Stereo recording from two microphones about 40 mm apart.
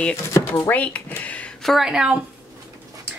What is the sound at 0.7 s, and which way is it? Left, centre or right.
Speech, left.